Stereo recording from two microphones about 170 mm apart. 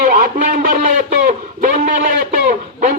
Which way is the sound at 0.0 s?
55° right (ahead or behind).